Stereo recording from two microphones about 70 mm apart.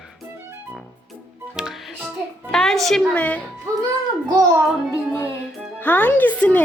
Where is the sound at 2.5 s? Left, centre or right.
Centre.